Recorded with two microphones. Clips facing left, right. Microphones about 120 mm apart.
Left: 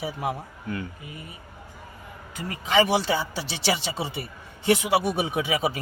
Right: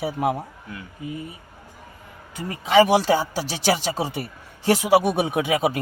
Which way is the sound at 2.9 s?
45° right (ahead or behind).